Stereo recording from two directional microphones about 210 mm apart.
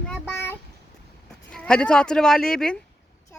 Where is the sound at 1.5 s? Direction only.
5° left (ahead or behind).